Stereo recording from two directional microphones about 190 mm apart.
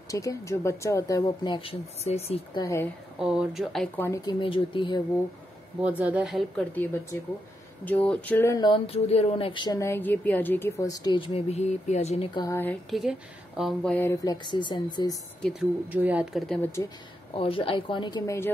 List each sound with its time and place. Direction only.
0.1 s speech: 15° left (ahead or behind); by 2.6 s 35° left (ahead or behind)
2.6 s speech: 15° left (ahead or behind)
3.2 s speech: 5° right (ahead or behind); by 5.0 s 25° left (ahead or behind)
5.8 s speech: 10° right (ahead or behind); by 12.3 s 35° left (ahead or behind)
12.4 s speech: 15° left (ahead or behind)
13.6 s speech: centre (ahead or behind); by 15.1 s 25° left (ahead or behind)
15.9 s speech: 10° right (ahead or behind)
16.4 s speech: 10° left (ahead or behind)
17.3 s speech: 30° left (ahead or behind)